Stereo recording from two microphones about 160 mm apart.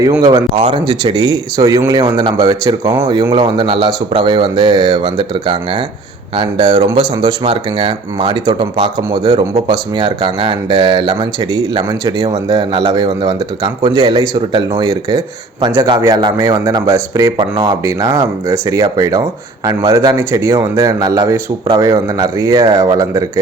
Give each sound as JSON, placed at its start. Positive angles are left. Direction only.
{"t": 0.2, "sound": "speech", "side_deg": -30}